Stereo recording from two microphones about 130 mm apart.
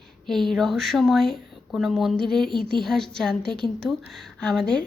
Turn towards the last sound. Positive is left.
turn(degrees=5)  # may be behind; listen again after turning